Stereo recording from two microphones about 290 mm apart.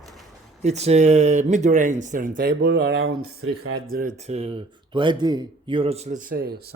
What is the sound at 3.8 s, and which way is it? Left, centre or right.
Speech, right.